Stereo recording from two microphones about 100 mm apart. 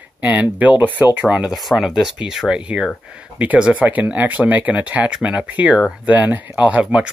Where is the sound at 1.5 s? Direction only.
Centre (ahead or behind).